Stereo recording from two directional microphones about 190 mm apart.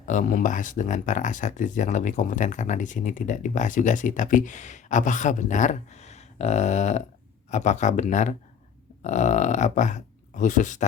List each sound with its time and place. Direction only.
0.0 s speech: 40° left (ahead or behind)